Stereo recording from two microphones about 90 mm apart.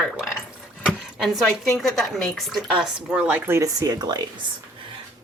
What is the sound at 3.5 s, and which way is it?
Speech, 35° right (ahead or behind).